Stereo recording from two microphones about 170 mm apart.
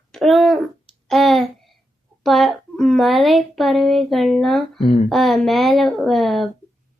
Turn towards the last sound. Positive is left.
turn(degrees=0)  # may be behind; listen again after turning